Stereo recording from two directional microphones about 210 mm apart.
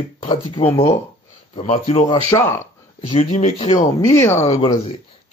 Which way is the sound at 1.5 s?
35° left (ahead or behind).